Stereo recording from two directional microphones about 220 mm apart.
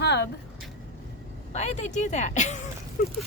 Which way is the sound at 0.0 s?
50° left (ahead or behind).